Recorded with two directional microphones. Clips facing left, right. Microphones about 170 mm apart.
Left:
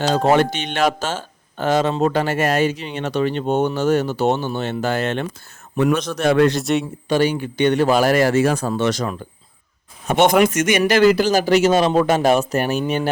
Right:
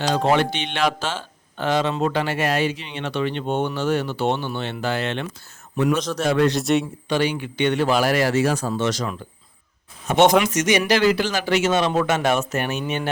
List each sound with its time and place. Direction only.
0.0 s speech: 45° left (ahead or behind)
5.7 s a man's voice: 60° left (ahead or behind)
6.5 s a man's voice: centre (ahead or behind)
7.1 s speech: 45° left (ahead or behind)
10.2 s speech: 10° left (ahead or behind)
10.4 s speech: 55° left (ahead or behind); by 12.8 s 35° left (ahead or behind)